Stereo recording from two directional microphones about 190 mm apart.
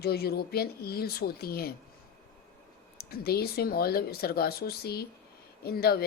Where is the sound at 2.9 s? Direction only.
55° left (ahead or behind).